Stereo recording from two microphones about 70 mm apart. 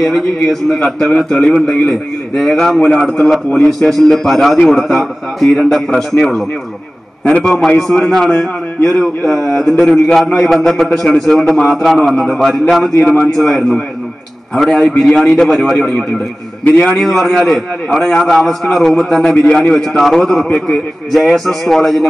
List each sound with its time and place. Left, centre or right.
0.7 s a man's voice: centre
7.4 s a man's voice: centre
13.0 s a man's voice: centre
13.3 s a man's voice: centre
15.3 s a man's voice: centre
16.6 s a man's voice: left
16.9 s a man's voice: centre